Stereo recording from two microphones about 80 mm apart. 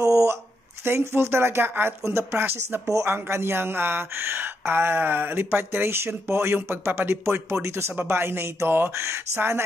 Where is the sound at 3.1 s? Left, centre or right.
Right.